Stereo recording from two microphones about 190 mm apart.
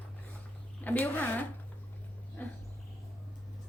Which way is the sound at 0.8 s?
10° left (ahead or behind).